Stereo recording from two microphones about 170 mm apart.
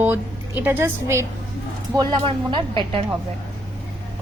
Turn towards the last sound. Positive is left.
turn(degrees=-30)  # may be behind; listen again after turning